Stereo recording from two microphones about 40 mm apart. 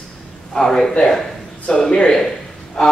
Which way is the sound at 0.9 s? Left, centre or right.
Centre.